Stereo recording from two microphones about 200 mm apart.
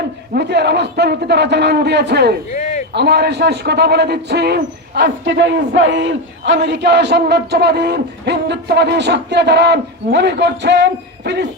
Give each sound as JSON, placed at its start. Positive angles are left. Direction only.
{"t": 0.3, "sound": "a man's voice", "side_deg": -55}
{"t": 2.5, "sound": "a sound", "side_deg": 35}
{"t": 2.9, "sound": "a man's voice", "side_deg": -55}